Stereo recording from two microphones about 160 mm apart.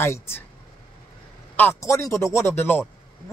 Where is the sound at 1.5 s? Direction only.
15° left (ahead or behind).